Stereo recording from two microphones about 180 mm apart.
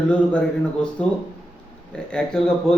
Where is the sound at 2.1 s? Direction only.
5° left (ahead or behind).